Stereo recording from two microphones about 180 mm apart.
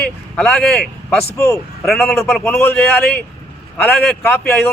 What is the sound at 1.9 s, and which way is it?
A man's voice, centre (ahead or behind).